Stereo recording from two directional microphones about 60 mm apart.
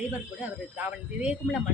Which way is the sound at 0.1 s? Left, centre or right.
Right.